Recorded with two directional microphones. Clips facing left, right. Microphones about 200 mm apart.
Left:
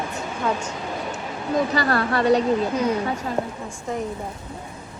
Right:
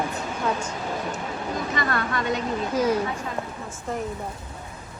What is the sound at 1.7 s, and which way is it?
Speech, 35° left (ahead or behind).